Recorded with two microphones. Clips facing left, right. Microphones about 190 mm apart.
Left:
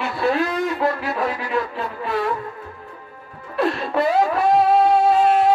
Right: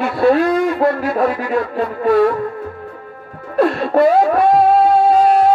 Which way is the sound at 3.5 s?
45° right (ahead or behind).